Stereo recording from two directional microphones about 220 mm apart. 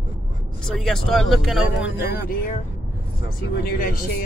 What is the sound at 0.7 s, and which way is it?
Speech, centre (ahead or behind).